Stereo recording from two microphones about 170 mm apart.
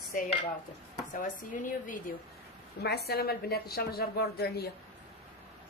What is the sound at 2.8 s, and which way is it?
A woman's voice, 70° left (ahead or behind).